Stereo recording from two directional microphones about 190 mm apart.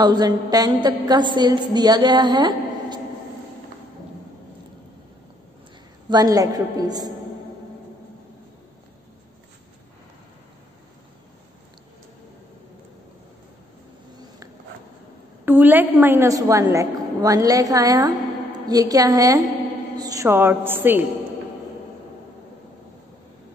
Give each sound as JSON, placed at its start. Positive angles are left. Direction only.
{"t": 0.0, "sound": "a woman's voice", "side_deg": -20}
{"t": 6.0, "sound": "a woman's voice", "side_deg": -20}
{"t": 15.4, "sound": "a woman's voice", "side_deg": -10}